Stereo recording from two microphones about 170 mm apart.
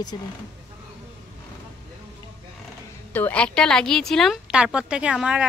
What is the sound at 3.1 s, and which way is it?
A woman's voice, 10° left (ahead or behind).